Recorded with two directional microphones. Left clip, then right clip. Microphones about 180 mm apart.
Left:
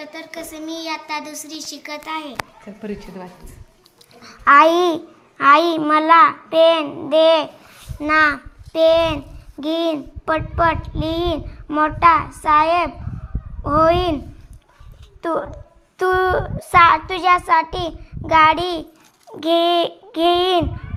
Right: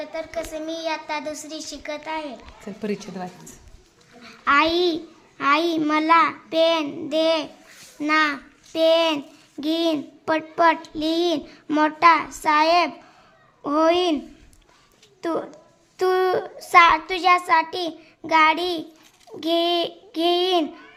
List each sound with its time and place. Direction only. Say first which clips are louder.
0.0 s a child's voice: right 3 dB; 15° right (ahead or behind)
2.7 s a woman's voice: right 1 dB; 35° right (ahead or behind)
4.2 s a child's voice: left 8 dB; 10° left (ahead or behind)
5.8 s child singing: left 6 dB; centre (ahead or behind)
7.9 s a child's voice: left 4 dB; centre (ahead or behind)
8.7 s child singing: left 4 dB; centre (ahead or behind)
9.8 s a child's voice: left 2 dB; 5° right (ahead or behind)
12.4 s child singing: left 3 dB; 5° right (ahead or behind)
15.2 s a woman's voice: left 4 dB; centre (ahead or behind)
16.0 s child singing: left 3 dB; centre (ahead or behind)
19.4 s a child's voice: left 5 dB; 10° left (ahead or behind)